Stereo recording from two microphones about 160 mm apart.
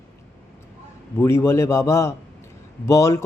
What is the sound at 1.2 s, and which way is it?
Speech, 20° left (ahead or behind).